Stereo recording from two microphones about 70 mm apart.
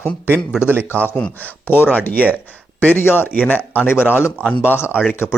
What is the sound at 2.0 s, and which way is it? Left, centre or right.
Speech, left.